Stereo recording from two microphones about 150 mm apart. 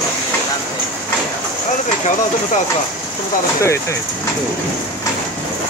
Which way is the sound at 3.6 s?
20° left (ahead or behind).